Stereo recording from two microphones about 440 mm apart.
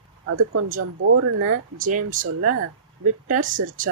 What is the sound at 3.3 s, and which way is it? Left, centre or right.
Speech, centre.